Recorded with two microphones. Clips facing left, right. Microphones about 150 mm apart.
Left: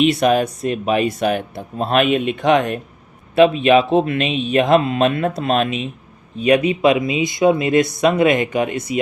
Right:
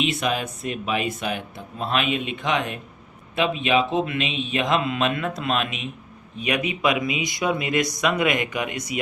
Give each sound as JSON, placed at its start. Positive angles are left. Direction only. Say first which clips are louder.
{"t": 0.1, "sound": "speech", "louder": "left 10 dB", "side_deg": 45}